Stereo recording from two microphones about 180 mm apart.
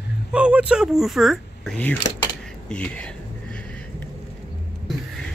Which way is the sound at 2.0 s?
25° left (ahead or behind).